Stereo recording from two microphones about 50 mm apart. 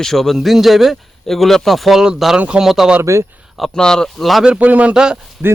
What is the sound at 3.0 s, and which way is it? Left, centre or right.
Speech, right.